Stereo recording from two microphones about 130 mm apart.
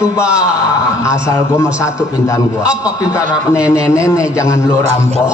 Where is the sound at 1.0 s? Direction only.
25° left (ahead or behind).